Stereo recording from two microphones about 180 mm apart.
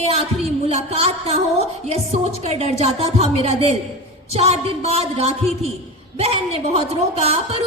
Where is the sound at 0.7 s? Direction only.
35° right (ahead or behind).